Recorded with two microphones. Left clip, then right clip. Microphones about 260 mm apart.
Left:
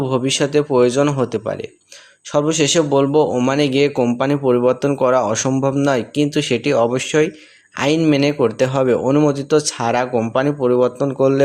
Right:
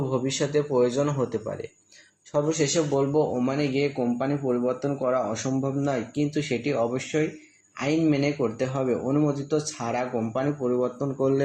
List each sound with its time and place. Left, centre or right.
0.1 s speech: left